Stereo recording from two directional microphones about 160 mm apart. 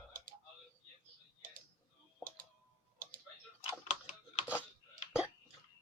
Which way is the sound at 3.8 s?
40° left (ahead or behind).